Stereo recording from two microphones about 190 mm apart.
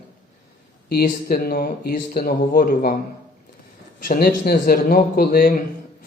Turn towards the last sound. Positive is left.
turn(degrees=50)  # may be behind; listen again after turning